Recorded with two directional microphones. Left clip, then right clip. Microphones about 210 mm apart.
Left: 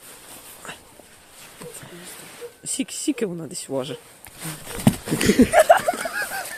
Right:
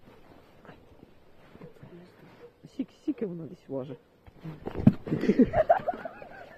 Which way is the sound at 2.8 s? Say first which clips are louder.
Left 8 dB; 10° left (ahead or behind).